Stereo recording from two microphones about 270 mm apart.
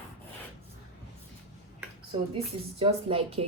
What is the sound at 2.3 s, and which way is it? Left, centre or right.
Speech, right.